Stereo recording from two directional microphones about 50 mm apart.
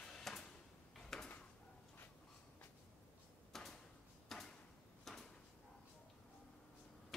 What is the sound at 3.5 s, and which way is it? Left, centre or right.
Drawer open or close, centre.